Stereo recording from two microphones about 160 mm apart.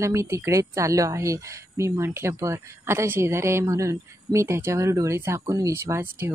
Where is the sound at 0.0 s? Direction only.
20° right (ahead or behind).